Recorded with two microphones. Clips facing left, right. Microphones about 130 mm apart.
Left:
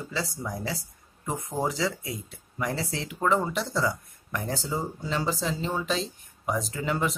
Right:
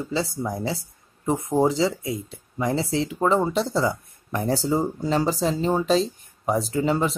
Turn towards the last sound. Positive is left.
turn(degrees=-30)  # may be behind; listen again after turning